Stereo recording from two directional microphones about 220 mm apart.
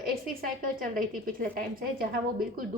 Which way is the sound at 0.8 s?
40° right (ahead or behind).